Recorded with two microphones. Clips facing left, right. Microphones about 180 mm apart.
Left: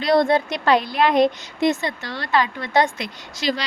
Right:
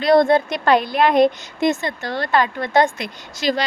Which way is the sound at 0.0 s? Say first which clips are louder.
Right 3 dB; 50° right (ahead or behind).